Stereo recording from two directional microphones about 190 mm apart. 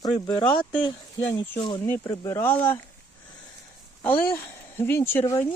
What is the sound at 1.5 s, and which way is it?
Speech, 25° left (ahead or behind).